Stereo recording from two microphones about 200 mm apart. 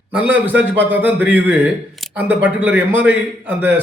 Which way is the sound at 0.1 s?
5° right (ahead or behind).